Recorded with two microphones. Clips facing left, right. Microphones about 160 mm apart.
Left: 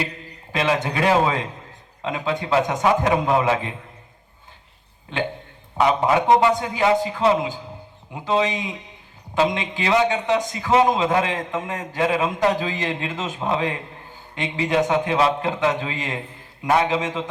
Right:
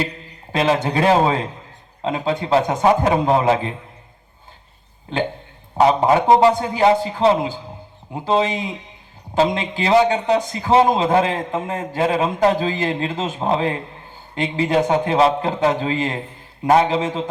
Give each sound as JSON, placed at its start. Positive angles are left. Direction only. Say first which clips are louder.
{"t": 0.5, "sound": "a man's voice", "louder": "right 4 dB", "side_deg": -30}
{"t": 5.7, "sound": "a man's voice", "louder": "right 4 dB", "side_deg": -30}